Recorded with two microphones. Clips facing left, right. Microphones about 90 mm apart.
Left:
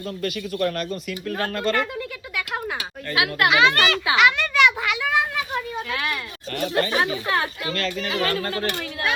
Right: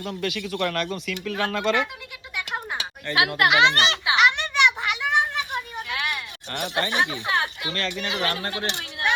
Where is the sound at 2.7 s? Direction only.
25° right (ahead or behind).